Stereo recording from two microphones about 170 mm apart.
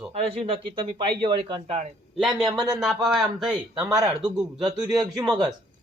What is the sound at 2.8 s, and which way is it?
A man's voice, centre (ahead or behind).